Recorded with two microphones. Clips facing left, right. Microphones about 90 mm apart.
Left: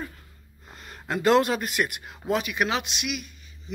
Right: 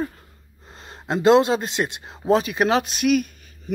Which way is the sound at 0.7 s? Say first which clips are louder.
Right 4 dB; 30° right (ahead or behind).